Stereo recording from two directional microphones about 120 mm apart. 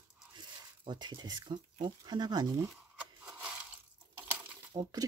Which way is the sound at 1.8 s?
35° right (ahead or behind).